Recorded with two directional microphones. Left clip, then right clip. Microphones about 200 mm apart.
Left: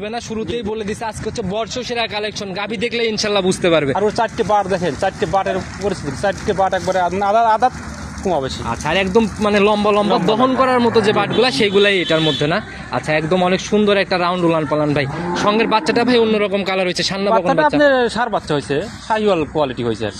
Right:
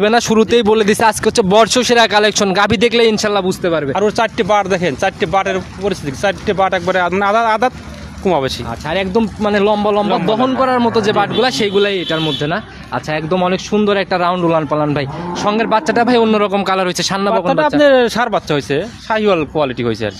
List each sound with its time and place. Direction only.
0.0 s speech: 55° right (ahead or behind)
3.6 s speech: 5° right (ahead or behind)
3.9 s speech: 50° right (ahead or behind)
8.6 s speech: 20° right (ahead or behind)
11.7 s speech: 15° right (ahead or behind); by 17.4 s 40° right (ahead or behind)
17.5 s speech: 25° right (ahead or behind)
17.7 s speech: 40° right (ahead or behind)